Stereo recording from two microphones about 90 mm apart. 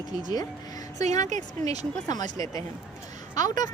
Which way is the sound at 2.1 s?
40° left (ahead or behind).